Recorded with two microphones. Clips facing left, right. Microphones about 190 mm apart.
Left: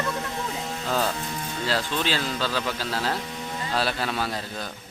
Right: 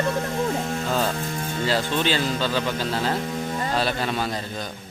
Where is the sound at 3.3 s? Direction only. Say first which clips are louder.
Right 6 dB; 50° right (ahead or behind).